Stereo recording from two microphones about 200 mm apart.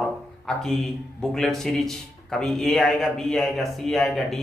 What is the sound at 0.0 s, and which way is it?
Speech, centre (ahead or behind).